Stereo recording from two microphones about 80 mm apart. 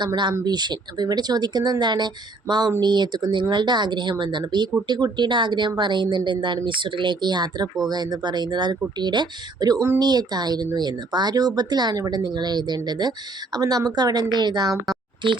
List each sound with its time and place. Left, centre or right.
0.4 s speech: right